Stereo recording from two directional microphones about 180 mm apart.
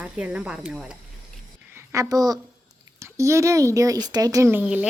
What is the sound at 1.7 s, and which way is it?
A woman's voice, 15° right (ahead or behind).